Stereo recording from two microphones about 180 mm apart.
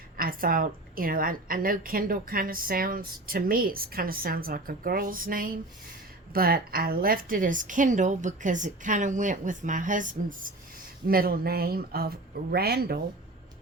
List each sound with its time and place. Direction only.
0.2 s a woman's voice: 55° right (ahead or behind)